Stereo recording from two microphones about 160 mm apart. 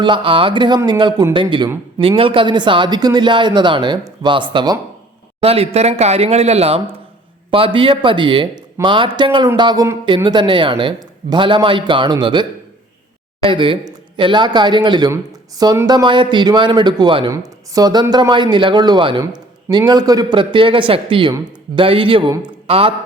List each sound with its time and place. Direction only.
0.0 s a man's voice: 30° right (ahead or behind)
5.4 s a man's voice: 40° right (ahead or behind)